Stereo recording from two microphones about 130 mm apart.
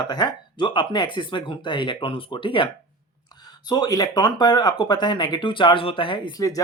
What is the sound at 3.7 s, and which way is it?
Speech, 30° left (ahead or behind).